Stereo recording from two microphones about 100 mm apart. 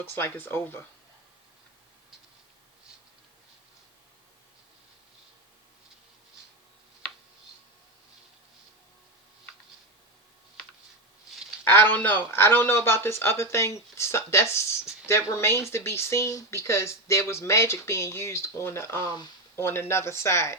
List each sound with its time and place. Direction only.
0.0 s speech: 20° left (ahead or behind)
11.6 s speech: 20° left (ahead or behind)